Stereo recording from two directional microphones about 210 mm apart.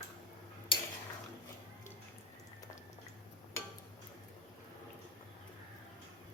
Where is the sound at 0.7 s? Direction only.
25° left (ahead or behind).